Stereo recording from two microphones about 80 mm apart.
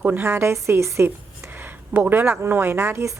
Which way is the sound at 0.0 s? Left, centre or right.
Right.